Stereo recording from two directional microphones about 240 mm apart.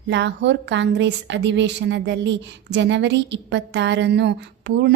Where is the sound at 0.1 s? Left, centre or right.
Right.